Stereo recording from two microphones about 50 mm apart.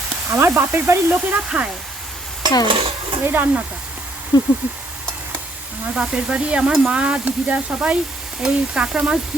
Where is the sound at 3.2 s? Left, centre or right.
Right.